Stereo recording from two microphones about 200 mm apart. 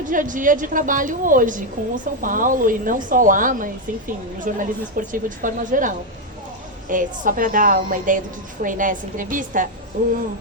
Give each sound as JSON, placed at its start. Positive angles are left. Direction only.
{"t": 0.0, "sound": "speech", "side_deg": -40}